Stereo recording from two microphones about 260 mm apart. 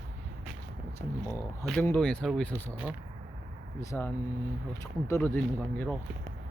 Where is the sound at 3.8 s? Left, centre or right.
Centre.